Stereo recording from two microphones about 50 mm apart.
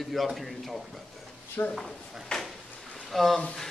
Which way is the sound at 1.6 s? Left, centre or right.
Left.